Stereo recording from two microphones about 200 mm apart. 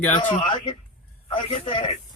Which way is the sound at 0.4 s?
25° left (ahead or behind).